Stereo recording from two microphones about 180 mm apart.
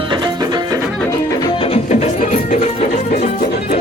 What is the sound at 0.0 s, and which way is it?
Music, 25° right (ahead or behind).